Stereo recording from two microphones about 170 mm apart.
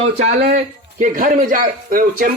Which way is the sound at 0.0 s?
40° right (ahead or behind).